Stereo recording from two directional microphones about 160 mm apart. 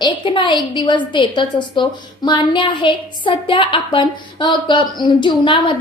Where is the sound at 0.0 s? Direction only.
30° left (ahead or behind).